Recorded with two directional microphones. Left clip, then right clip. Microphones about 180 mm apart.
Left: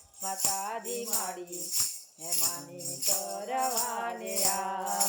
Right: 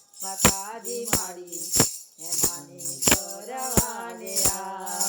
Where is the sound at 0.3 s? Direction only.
5° left (ahead or behind).